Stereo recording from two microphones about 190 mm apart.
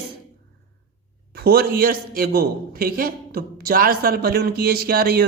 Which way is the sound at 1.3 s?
55° right (ahead or behind).